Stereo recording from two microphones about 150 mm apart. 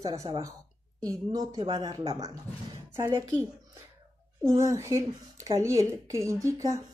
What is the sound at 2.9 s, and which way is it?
Speech, 25° right (ahead or behind).